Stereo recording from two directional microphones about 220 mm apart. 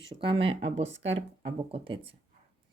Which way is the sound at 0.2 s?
25° right (ahead or behind).